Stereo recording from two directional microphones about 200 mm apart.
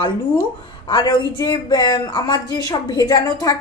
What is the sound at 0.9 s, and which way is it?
A woman's voice, 20° left (ahead or behind).